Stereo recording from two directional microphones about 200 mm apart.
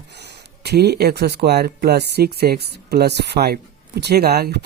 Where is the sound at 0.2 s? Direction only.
55° right (ahead or behind).